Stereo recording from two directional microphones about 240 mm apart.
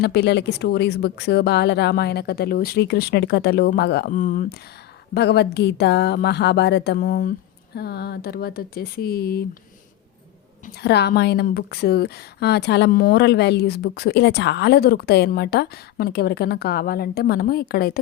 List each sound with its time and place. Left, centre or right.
0.0 s speech: left
10.8 s speech: left